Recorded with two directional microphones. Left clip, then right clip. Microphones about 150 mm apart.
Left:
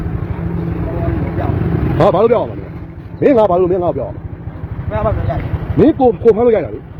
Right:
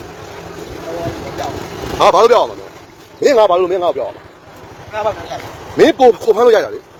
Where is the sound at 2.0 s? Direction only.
30° right (ahead or behind).